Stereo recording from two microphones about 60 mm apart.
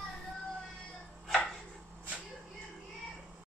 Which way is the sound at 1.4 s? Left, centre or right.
Centre.